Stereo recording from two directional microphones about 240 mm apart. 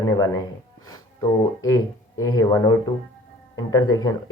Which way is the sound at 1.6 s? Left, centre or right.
Centre.